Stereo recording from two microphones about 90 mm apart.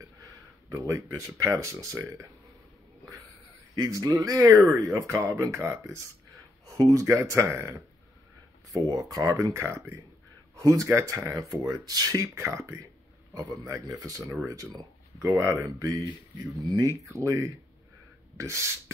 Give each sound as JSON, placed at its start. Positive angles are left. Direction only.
{"t": 0.7, "sound": "speech", "side_deg": -35}
{"t": 3.7, "sound": "speech", "side_deg": -40}
{"t": 8.7, "sound": "speech", "side_deg": -40}
{"t": 17.0, "sound": "speech", "side_deg": -35}